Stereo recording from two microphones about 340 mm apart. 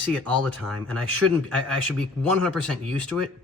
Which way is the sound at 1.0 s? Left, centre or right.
Right.